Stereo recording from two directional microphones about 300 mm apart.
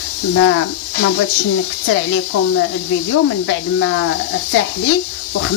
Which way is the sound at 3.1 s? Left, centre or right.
Left.